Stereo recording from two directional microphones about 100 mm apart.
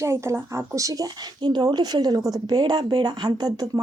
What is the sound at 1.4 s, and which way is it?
Speech, 45° right (ahead or behind).